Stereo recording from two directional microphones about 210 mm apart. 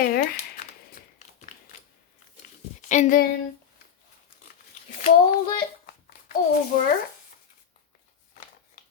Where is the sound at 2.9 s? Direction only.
35° left (ahead or behind).